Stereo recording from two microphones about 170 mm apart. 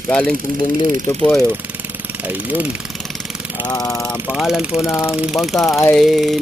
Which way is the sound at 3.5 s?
25° left (ahead or behind).